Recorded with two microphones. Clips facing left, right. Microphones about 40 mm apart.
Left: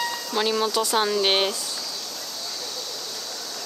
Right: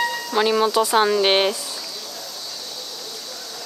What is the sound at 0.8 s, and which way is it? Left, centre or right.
Speech, right.